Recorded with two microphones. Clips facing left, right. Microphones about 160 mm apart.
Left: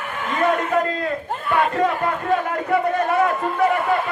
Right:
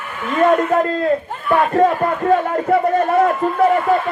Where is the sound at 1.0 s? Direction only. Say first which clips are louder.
Right 6 dB; 45° right (ahead or behind).